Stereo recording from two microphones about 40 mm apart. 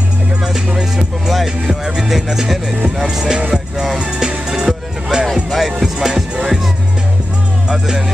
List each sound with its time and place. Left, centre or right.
0.9 s music: centre
4.5 s music: centre
5.2 s music: centre
5.8 s music: centre
7.7 s music: centre